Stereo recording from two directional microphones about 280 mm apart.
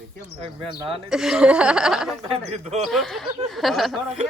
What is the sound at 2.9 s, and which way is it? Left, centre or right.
Speech, centre.